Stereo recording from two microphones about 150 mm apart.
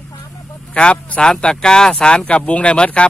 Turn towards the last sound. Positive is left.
turn(degrees=5)  # may be behind; listen again after turning